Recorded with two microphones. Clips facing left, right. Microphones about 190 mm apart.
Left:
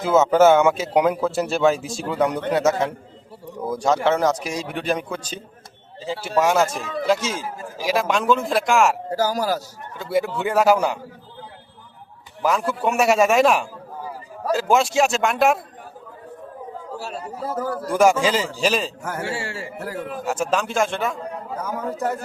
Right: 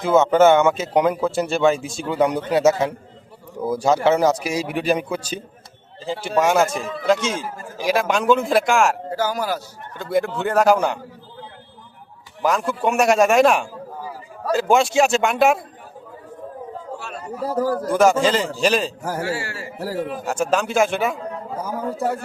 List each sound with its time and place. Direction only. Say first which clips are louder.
0.0 s speech: right 1 dB; 5° left (ahead or behind)
9.0 s speech: left 1 dB; 35° left (ahead or behind)
10.0 s speech: right 1 dB; 5° left (ahead or behind)
12.4 s speech: right 1 dB; 5° left (ahead or behind)
17.7 s a man's voice: left 1 dB; 10° left (ahead or behind)
19.0 s a man's voice: right 3 dB; 35° right (ahead or behind)
19.3 s a man's voice: right 2 dB; 25° left (ahead or behind)
19.8 s a man's voice: right 6 dB; 35° right (ahead or behind)
20.2 s speech: right 1 dB; centre (ahead or behind)
21.6 s a man's voice: right 1 dB; 30° right (ahead or behind)